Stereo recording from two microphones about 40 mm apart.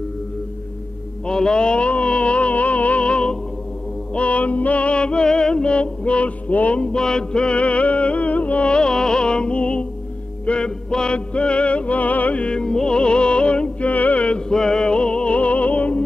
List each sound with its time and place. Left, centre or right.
1.2 s music: left
6.8 s music: left
12.4 s music: centre; by 14.4 s left
14.5 s music: centre; by 16.0 s left